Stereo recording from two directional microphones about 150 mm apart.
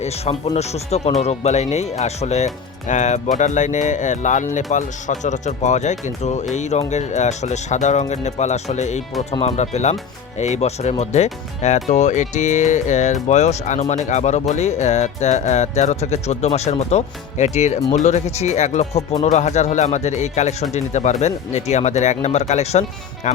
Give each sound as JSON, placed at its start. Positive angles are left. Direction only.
{"t": 0.5, "sound": "speech", "side_deg": 45}